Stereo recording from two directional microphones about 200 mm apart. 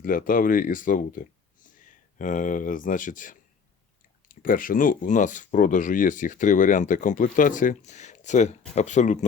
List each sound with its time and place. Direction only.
0.0 s speech: 45° left (ahead or behind)